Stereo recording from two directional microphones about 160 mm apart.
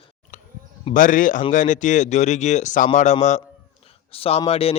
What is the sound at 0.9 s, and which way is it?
A man's voice, 55° left (ahead or behind).